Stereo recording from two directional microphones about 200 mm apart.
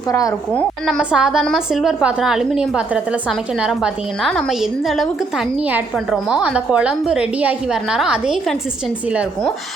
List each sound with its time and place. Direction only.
0.1 s a woman's voice: 15° left (ahead or behind)
0.9 s a woman's voice: centre (ahead or behind)